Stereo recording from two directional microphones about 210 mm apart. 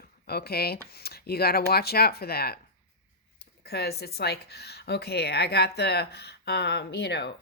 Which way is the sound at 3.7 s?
50° left (ahead or behind).